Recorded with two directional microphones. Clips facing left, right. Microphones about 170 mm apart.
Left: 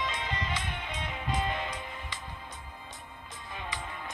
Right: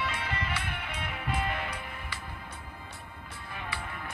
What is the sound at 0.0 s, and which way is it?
Music, 20° left (ahead or behind).